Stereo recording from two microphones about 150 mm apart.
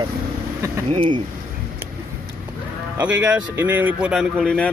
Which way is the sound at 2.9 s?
10° right (ahead or behind).